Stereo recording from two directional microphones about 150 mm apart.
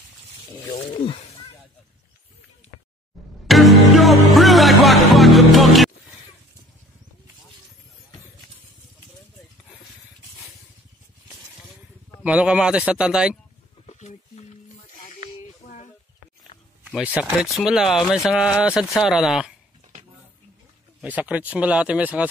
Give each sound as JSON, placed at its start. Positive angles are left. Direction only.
{"t": 0.5, "sound": "speech", "side_deg": 30}
{"t": 3.4, "sound": "music", "side_deg": 0}
{"t": 12.2, "sound": "speech", "side_deg": -5}
{"t": 13.8, "sound": "a sound", "side_deg": 50}
{"t": 16.8, "sound": "speech", "side_deg": -5}
{"t": 21.0, "sound": "speech", "side_deg": -10}